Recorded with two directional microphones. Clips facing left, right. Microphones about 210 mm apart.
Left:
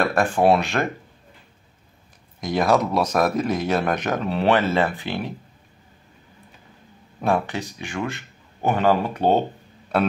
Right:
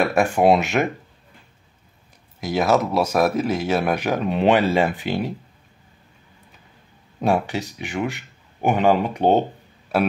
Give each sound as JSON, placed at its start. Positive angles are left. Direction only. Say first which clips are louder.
{"t": 0.0, "sound": "speech", "louder": "right 1 dB", "side_deg": -10}
{"t": 2.4, "sound": "speech", "louder": "even", "side_deg": -5}
{"t": 7.2, "sound": "a man's voice", "louder": "right 2 dB", "side_deg": -15}